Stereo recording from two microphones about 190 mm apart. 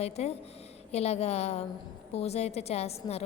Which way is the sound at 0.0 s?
35° left (ahead or behind).